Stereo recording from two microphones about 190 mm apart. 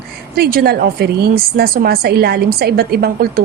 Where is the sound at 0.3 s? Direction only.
55° right (ahead or behind).